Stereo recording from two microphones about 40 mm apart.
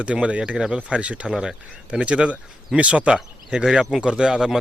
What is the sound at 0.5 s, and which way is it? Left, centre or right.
Speech, centre.